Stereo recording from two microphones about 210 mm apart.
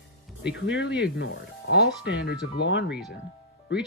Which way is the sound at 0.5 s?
55° left (ahead or behind).